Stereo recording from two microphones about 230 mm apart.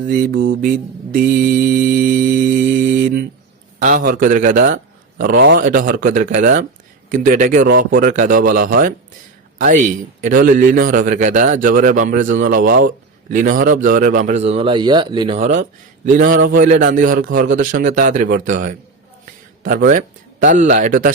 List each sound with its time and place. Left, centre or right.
0.6 s mantra: right
3.8 s a man's voice: right